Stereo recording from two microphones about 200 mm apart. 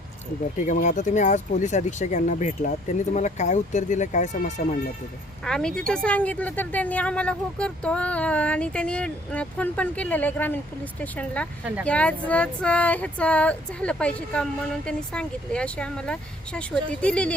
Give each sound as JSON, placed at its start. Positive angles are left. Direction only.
{"t": 0.7, "sound": "speech", "side_deg": 40}
{"t": 5.5, "sound": "a woman's voice", "side_deg": 5}
{"t": 11.6, "sound": "speech", "side_deg": -5}
{"t": 11.9, "sound": "female singing", "side_deg": 5}